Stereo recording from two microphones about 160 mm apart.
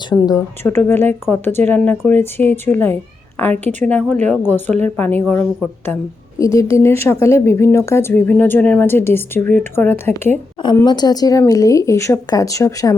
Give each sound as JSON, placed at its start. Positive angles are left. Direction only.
{"t": 0.1, "sound": "speech", "side_deg": 25}
{"t": 6.4, "sound": "speech", "side_deg": 20}
{"t": 10.8, "sound": "speech", "side_deg": 25}